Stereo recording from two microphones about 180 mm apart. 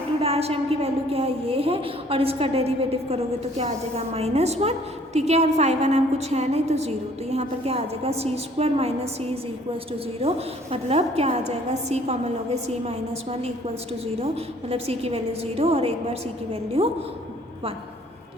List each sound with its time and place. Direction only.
0.2 s a woman's voice: 35° right (ahead or behind)
10.2 s a woman's voice: 35° right (ahead or behind)
14.7 s a woman's voice: 35° right (ahead or behind)